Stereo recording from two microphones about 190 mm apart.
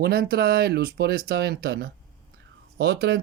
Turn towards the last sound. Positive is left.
turn(degrees=-60)  # may be behind; listen again after turning